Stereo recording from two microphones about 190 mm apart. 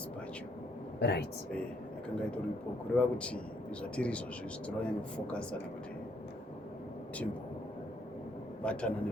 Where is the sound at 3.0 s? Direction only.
5° left (ahead or behind).